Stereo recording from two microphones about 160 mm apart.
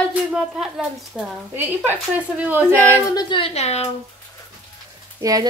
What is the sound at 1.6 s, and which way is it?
Speech, 10° right (ahead or behind).